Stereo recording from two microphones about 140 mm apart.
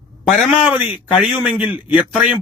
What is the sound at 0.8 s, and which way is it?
Speech, 40° left (ahead or behind).